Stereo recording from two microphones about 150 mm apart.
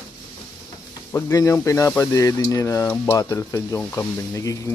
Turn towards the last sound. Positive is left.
turn(degrees=20)  # may be behind; listen again after turning